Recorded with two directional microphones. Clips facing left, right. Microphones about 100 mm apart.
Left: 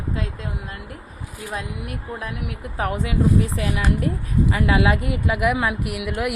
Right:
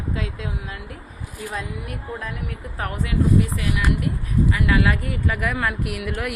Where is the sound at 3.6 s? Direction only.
30° left (ahead or behind).